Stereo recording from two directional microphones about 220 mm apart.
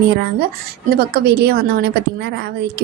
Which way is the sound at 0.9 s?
45° right (ahead or behind).